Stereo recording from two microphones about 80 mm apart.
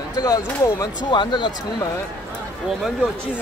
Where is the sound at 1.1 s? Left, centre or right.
Left.